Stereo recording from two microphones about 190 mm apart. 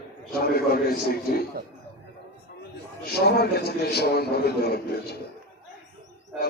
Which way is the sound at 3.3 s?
55° left (ahead or behind).